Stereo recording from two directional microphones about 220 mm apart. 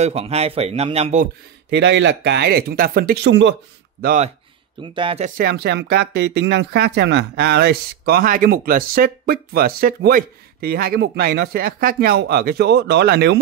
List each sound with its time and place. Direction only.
0.0 s speech: 30° right (ahead or behind)
1.7 s speech: 50° right (ahead or behind)
3.3 s speech: 55° right (ahead or behind)
4.0 s speech: 35° right (ahead or behind)
4.8 s speech: 25° right (ahead or behind)
5.4 s speech: 45° right (ahead or behind)